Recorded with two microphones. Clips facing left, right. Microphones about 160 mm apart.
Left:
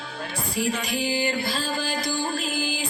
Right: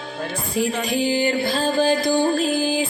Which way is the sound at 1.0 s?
30° right (ahead or behind).